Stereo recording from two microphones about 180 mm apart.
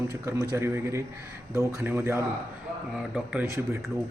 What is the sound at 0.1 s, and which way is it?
A man's voice, 15° right (ahead or behind).